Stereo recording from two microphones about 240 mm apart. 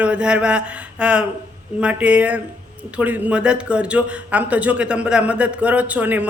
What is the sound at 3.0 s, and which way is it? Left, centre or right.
A man's voice, centre.